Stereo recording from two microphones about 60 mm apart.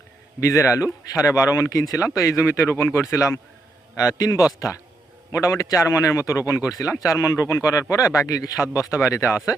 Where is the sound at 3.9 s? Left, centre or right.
Left.